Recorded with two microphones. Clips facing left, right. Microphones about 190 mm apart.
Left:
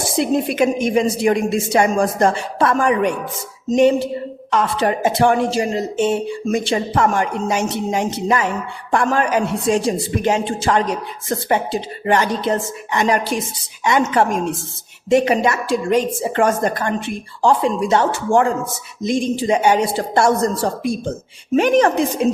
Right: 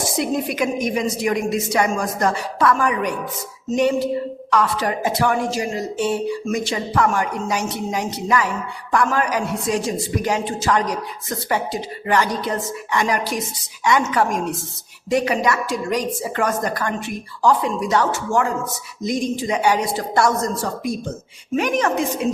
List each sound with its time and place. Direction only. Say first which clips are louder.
0.2 s a woman's voice: left 5 dB; 25° left (ahead or behind)
4.5 s a woman's voice: left 2 dB; 25° left (ahead or behind)